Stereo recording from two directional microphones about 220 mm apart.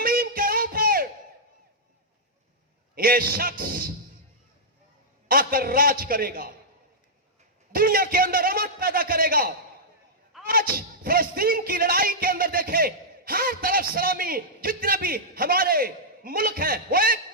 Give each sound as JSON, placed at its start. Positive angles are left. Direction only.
{"t": 0.0, "sound": "music", "side_deg": -40}
{"t": 2.9, "sound": "speech", "side_deg": -40}
{"t": 5.3, "sound": "speech", "side_deg": -40}
{"t": 7.7, "sound": "speech", "side_deg": -40}